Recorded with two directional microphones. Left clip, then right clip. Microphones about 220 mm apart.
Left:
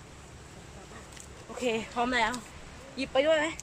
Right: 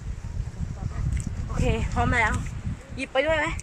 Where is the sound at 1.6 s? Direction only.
5° right (ahead or behind).